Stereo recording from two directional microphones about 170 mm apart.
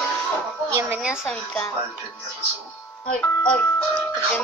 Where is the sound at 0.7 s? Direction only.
10° right (ahead or behind).